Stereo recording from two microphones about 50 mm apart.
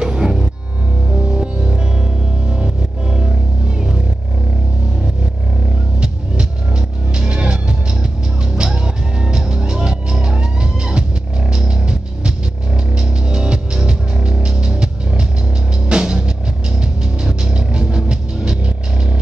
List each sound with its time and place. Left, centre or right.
0.0 s music: centre
7.2 s music: right
8.5 s music: centre